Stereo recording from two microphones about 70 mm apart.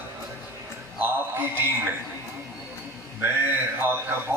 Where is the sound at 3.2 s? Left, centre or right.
Right.